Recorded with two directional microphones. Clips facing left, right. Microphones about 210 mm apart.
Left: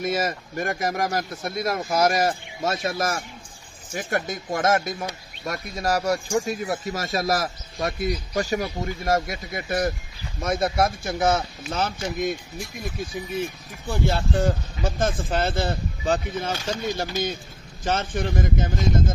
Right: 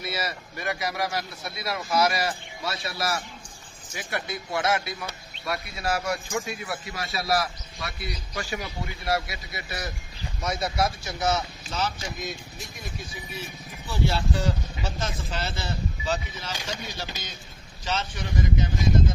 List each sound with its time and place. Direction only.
0.0 s speech: 45° left (ahead or behind)